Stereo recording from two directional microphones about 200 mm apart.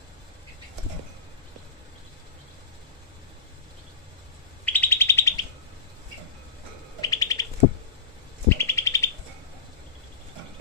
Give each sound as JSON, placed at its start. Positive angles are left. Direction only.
{"t": 4.6, "sound": "bird", "side_deg": 10}
{"t": 7.0, "sound": "bird", "side_deg": 20}
{"t": 8.5, "sound": "bird", "side_deg": 15}